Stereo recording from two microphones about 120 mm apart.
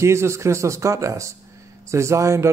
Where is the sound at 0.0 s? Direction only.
25° right (ahead or behind).